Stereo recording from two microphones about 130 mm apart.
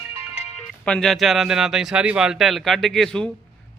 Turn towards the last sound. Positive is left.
turn(degrees=5)  # may be behind; listen again after turning